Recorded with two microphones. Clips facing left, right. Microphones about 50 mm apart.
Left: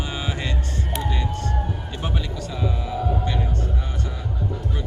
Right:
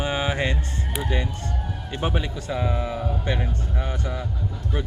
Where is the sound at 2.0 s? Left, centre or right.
Right.